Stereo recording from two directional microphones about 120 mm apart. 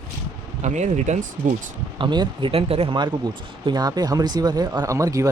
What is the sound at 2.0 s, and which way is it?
Speech, 40° right (ahead or behind).